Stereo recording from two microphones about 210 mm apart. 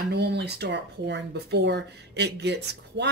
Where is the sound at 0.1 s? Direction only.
50° right (ahead or behind).